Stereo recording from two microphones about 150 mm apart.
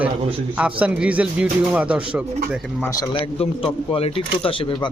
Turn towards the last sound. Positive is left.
turn(degrees=35)  # may be behind; listen again after turning